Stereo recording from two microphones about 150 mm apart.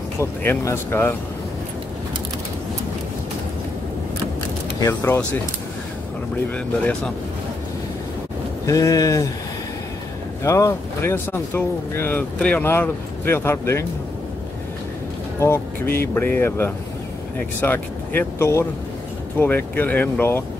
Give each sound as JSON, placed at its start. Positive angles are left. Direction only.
{"t": 0.2, "sound": "speech", "side_deg": 15}
{"t": 4.7, "sound": "speech", "side_deg": 20}
{"t": 8.6, "sound": "speech", "side_deg": 20}
{"t": 10.4, "sound": "speech", "side_deg": 20}
{"t": 15.4, "sound": "speech", "side_deg": 15}